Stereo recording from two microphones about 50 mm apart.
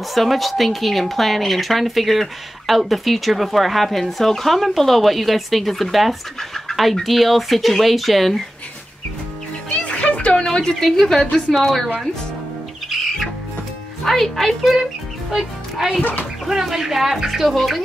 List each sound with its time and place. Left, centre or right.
0.1 s speech: centre
9.8 s music: left
10.4 s a woman's voice: centre
14.0 s speech: centre
16.0 s speech: left
16.4 s speech: centre